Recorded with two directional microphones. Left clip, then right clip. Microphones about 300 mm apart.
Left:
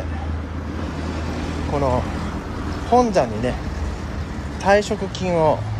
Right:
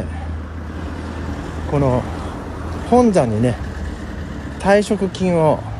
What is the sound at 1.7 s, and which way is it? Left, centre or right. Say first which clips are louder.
Speech: right 3 dB; right.